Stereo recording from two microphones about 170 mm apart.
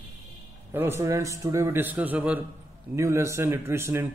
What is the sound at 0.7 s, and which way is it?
Speech, 15° right (ahead or behind).